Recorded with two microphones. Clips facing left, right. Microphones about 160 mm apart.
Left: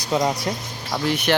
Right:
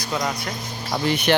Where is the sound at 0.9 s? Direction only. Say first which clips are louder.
Right 1 dB; centre (ahead or behind).